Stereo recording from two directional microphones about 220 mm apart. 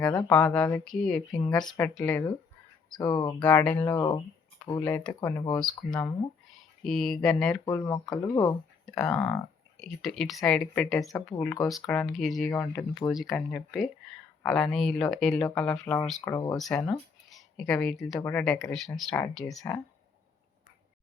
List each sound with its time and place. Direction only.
0.0 s speech: 15° left (ahead or behind)
3.9 s speech: 20° left (ahead or behind)
4.8 s speech: 10° left (ahead or behind)
5.5 s speech: 5° left (ahead or behind)
7.7 s speech: 15° left (ahead or behind)
9.0 s speech: 5° left (ahead or behind)
11.1 s speech: 15° left (ahead or behind)
11.7 s speech: 5° left (ahead or behind)
12.5 s speech: 10° left (ahead or behind)
16.2 s speech: 15° left (ahead or behind)
16.6 s speech: centre (ahead or behind)
17.2 s a sound: centre (ahead or behind)
18.2 s speech: 10° left (ahead or behind)